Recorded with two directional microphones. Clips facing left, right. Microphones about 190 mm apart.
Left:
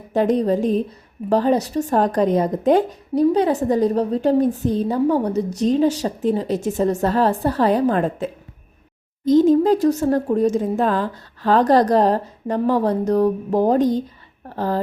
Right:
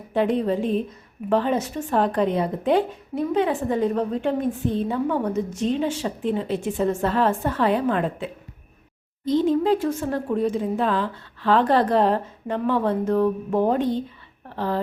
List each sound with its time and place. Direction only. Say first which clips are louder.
0.1 s a woman's voice: left 4 dB; 40° left (ahead or behind)